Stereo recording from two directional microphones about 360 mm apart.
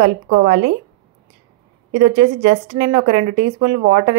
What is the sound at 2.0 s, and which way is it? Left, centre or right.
A woman's voice, centre.